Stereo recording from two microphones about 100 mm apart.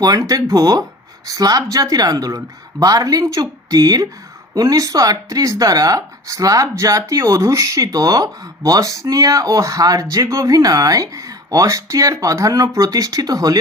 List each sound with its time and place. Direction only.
0.0 s speech: 35° right (ahead or behind)